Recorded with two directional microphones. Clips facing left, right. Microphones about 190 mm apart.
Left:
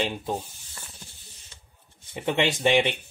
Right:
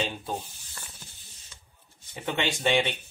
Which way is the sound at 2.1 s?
20° left (ahead or behind).